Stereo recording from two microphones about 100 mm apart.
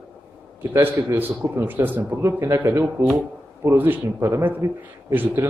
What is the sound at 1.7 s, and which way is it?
A man's voice, 20° right (ahead or behind).